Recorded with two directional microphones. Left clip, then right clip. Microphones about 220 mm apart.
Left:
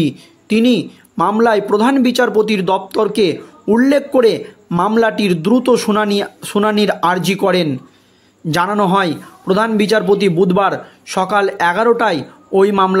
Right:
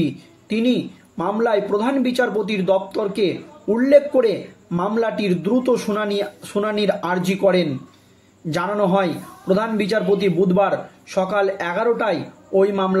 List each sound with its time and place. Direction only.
0.0 s speech: 45° left (ahead or behind)